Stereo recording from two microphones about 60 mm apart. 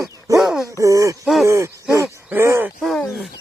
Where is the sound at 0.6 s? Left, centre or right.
Right.